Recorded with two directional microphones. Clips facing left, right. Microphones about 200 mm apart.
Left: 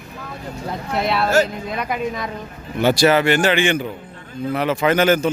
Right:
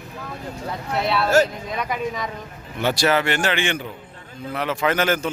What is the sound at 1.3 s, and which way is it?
A man's voice, 10° left (ahead or behind).